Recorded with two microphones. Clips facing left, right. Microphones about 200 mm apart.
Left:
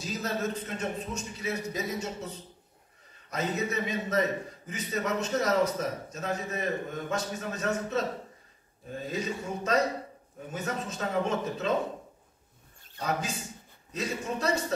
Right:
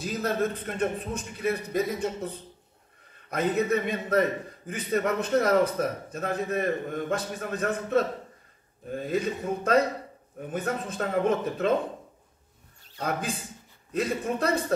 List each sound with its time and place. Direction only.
0.0 s a man's voice: 55° right (ahead or behind)
9.0 s a man's voice: 55° right (ahead or behind)
13.0 s a man's voice: 55° right (ahead or behind)